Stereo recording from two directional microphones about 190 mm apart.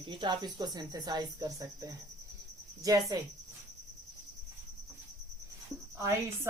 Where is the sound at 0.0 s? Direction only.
25° right (ahead or behind).